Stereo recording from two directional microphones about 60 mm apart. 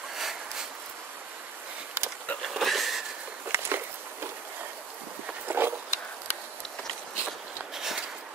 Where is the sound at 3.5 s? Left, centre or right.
Right.